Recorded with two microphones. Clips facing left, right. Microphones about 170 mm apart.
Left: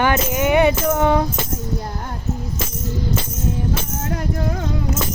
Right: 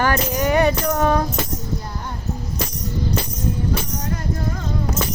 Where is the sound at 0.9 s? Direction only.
15° left (ahead or behind).